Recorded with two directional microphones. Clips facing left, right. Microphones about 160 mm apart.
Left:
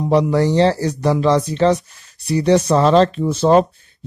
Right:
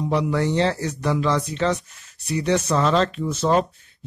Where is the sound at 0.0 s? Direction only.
40° left (ahead or behind).